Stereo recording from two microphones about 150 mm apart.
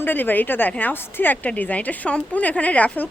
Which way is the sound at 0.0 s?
10° left (ahead or behind).